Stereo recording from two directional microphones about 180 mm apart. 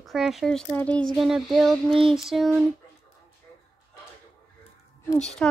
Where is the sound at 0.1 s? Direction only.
Centre (ahead or behind).